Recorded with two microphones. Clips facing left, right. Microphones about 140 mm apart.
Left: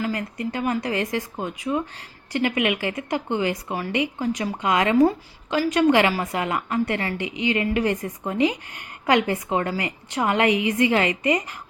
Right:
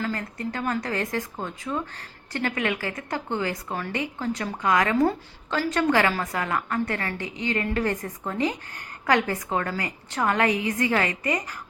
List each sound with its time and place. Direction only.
0.0 s a woman's voice: 15° left (ahead or behind)